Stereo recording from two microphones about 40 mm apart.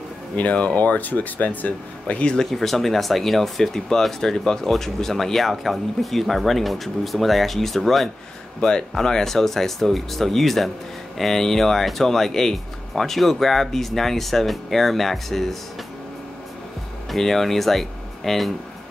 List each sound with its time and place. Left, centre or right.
0.4 s speech: left
2.3 s speech: centre
8.5 s speech: centre
17.1 s speech: centre